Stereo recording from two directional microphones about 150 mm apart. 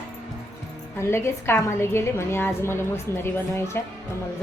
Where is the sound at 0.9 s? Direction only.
15° left (ahead or behind).